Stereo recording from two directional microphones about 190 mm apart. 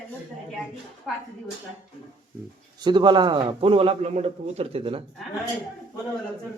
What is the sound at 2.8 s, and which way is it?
A man's voice, 25° right (ahead or behind).